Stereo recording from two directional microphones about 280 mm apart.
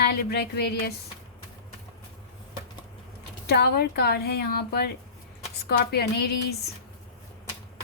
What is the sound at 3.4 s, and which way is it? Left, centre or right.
Speech, left.